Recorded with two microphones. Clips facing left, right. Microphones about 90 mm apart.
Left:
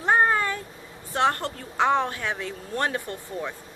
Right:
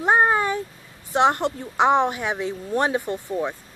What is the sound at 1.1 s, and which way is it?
A woman's voice, 20° right (ahead or behind).